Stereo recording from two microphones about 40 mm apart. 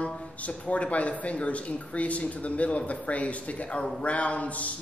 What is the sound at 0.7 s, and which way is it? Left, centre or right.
Speech, left.